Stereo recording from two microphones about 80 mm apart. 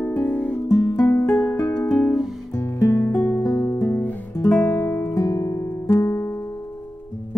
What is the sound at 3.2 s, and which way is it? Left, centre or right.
Music, left.